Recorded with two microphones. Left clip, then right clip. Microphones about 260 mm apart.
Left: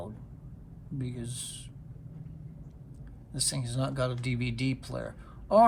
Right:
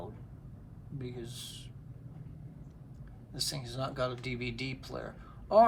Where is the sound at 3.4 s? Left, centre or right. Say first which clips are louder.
Left 3 dB; left.